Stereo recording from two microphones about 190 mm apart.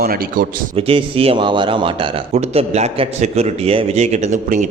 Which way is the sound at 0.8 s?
30° right (ahead or behind).